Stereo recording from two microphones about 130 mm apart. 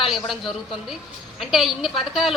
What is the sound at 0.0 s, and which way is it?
Speech, centre (ahead or behind).